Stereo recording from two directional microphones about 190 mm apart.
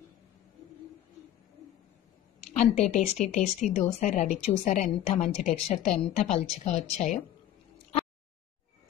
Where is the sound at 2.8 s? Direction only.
35° left (ahead or behind).